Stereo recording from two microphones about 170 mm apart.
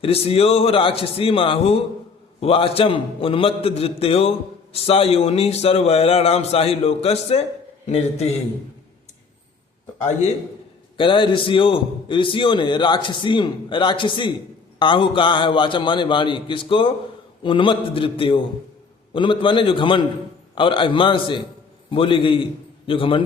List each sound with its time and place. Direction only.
0.0 s a man's voice: 35° left (ahead or behind)
10.9 s a man's voice: 30° left (ahead or behind)